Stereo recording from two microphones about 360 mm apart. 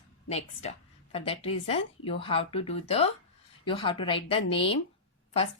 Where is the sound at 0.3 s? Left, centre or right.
Centre.